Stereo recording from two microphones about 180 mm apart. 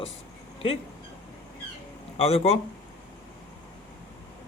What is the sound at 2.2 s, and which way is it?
Speech, 35° left (ahead or behind).